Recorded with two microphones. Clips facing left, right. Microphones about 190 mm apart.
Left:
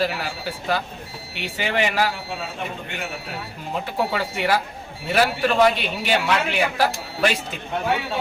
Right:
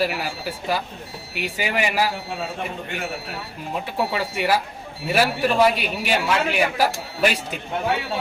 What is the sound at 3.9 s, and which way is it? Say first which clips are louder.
A man's voice: even; 5° right (ahead or behind).